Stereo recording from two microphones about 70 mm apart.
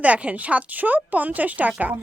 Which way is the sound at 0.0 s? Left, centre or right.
Centre.